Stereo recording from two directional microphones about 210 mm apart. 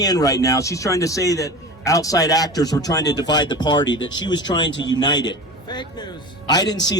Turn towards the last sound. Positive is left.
turn(degrees=20)  # may be behind; listen again after turning